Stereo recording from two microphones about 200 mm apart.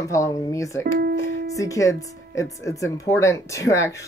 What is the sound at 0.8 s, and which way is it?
Music, 50° right (ahead or behind).